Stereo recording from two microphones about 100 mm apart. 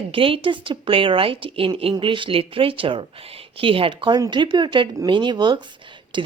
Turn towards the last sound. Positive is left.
turn(degrees=-50)  # may be behind; listen again after turning